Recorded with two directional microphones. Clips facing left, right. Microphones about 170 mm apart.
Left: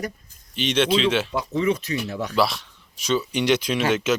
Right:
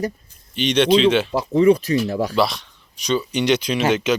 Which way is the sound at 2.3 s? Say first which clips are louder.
Right 2 dB; 5° left (ahead or behind).